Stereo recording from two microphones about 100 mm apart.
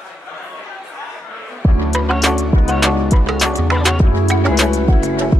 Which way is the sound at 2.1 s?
Centre (ahead or behind).